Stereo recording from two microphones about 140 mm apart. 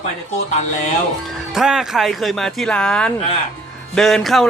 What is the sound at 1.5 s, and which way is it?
A man's voice, 5° right (ahead or behind).